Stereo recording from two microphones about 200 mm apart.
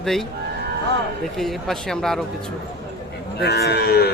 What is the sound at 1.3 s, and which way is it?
Speech, centre (ahead or behind).